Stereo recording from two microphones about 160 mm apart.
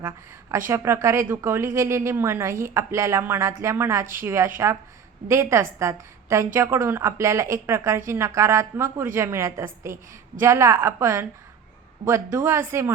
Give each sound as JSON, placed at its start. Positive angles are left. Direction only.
{"t": 0.7, "sound": "a woman's voice", "side_deg": -20}